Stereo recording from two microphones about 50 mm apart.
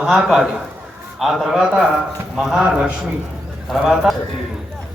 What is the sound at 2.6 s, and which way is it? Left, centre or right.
Speech, right.